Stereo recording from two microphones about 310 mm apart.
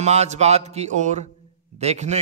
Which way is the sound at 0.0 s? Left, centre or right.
Right.